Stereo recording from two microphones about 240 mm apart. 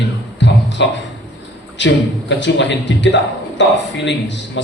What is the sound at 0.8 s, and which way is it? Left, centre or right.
A man's voice, left.